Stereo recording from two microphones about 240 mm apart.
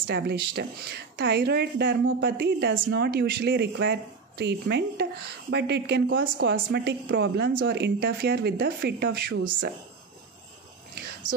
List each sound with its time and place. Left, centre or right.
0.0 s a woman's voice: right